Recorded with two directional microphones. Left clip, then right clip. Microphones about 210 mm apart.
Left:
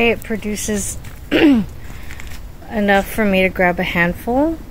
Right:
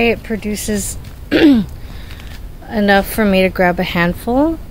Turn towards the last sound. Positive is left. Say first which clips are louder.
# right 2 dB
turn(degrees=-10)  # may be behind; listen again after turning